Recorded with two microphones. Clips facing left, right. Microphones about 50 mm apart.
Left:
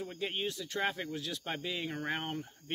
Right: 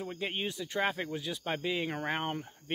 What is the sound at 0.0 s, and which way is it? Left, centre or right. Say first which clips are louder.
Speech: right 1 dB; centre.